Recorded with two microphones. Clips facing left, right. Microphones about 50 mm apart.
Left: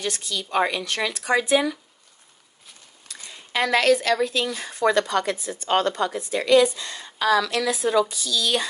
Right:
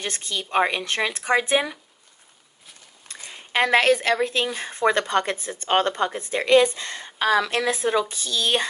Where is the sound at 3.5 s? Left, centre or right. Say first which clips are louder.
Right 1 dB; right.